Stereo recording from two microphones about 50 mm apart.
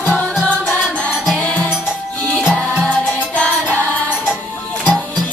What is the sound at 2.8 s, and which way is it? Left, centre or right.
Music, left.